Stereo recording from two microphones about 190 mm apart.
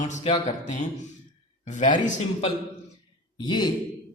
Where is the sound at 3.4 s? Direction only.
25° left (ahead or behind).